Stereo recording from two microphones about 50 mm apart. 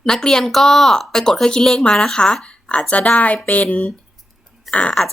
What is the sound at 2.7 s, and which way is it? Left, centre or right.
A woman's voice, left.